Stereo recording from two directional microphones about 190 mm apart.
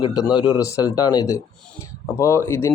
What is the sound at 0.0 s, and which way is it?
A man's voice, 20° left (ahead or behind).